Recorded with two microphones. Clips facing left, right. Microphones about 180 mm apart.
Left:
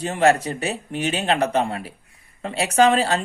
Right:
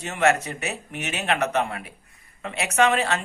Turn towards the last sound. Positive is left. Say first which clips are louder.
# left 4 dB
turn(degrees=35)  # may be behind; listen again after turning